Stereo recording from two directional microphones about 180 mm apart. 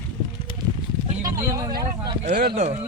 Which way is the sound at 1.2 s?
15° right (ahead or behind).